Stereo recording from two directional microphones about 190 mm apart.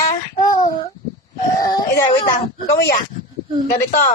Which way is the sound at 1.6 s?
25° left (ahead or behind).